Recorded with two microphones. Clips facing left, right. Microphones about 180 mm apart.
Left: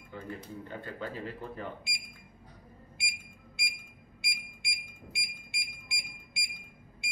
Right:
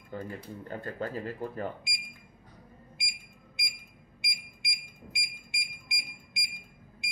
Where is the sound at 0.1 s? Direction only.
40° right (ahead or behind).